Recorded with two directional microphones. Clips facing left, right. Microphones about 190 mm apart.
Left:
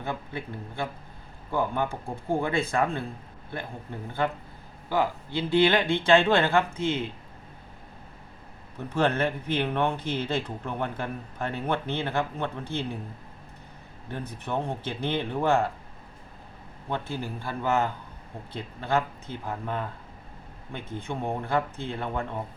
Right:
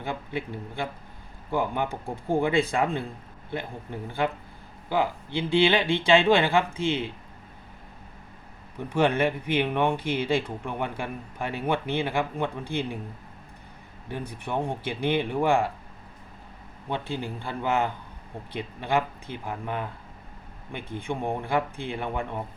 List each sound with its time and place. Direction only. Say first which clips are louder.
0.0 s speech: right 2 dB; 15° right (ahead or behind)
4.9 s speech: even; 15° right (ahead or behind)
8.9 s speech: right 2 dB; 15° right (ahead or behind)
14.1 s speech: right 1 dB; 15° right (ahead or behind)
16.9 s speech: right 1 dB; 15° right (ahead or behind)